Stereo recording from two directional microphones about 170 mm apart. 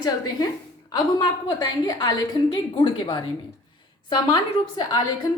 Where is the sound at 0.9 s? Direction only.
20° left (ahead or behind).